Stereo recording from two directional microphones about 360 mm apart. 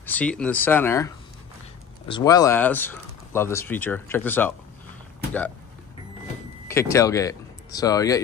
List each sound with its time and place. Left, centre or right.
0.0 s speech: centre
6.7 s speech: centre